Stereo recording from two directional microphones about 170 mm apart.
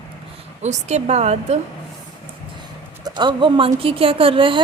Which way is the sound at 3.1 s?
25° right (ahead or behind).